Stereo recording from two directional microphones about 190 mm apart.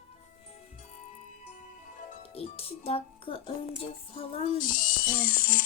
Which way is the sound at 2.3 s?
30° left (ahead or behind).